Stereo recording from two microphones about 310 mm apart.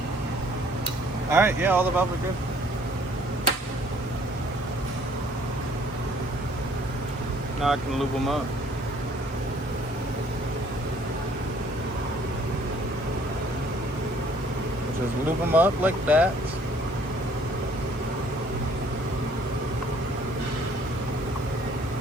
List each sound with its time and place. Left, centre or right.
1.3 s speech: centre
7.6 s speech: centre
15.5 s speech: centre